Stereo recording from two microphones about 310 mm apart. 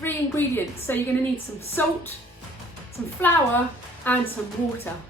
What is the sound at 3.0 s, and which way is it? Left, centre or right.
A woman's voice, centre.